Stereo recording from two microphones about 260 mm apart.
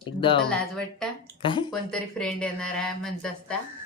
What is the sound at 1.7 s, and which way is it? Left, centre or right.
Speech, centre.